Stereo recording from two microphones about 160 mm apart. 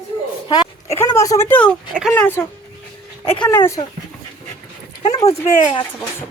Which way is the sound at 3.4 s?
15° left (ahead or behind).